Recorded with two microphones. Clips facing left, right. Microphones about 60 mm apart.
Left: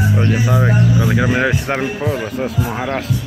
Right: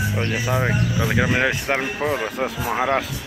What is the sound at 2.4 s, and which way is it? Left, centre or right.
Basketball bounce, centre.